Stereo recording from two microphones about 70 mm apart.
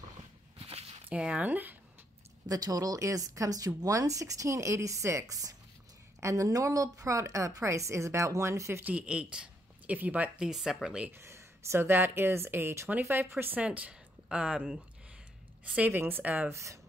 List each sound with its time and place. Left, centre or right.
1.1 s speech: centre
2.4 s a woman's voice: right
8.8 s speech: centre
10.4 s speech: centre
11.1 s speech: right
13.6 s a woman's voice: centre
15.9 s speech: right
16.4 s a woman's voice: right